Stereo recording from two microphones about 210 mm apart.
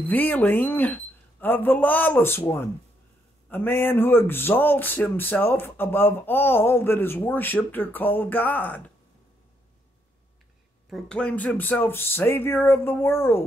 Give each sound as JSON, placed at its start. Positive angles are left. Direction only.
{"t": 0.0, "sound": "a man's voice", "side_deg": 10}
{"t": 10.9, "sound": "a man's voice", "side_deg": 0}